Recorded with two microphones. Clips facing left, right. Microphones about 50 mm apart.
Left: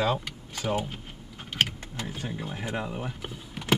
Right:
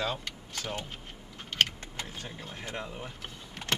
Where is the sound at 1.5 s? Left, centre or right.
Centre.